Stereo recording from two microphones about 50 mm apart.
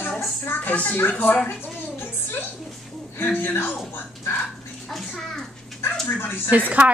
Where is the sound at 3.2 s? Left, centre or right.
Left.